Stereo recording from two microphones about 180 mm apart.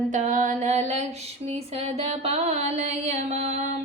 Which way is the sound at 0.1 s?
40° right (ahead or behind).